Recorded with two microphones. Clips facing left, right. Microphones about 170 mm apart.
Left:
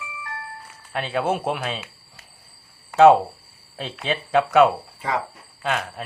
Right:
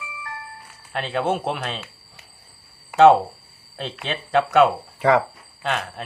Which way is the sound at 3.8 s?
Centre (ahead or behind).